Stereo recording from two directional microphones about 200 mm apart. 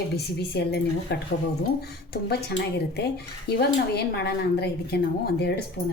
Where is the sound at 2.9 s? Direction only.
55° left (ahead or behind).